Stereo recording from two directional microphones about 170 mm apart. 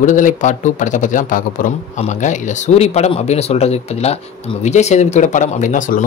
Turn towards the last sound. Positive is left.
turn(degrees=50)  # may be behind; listen again after turning